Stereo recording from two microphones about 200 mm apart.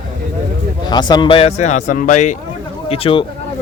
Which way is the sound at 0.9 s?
20° left (ahead or behind).